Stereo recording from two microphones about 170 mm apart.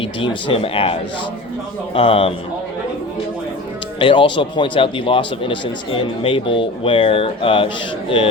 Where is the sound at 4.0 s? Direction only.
30° left (ahead or behind).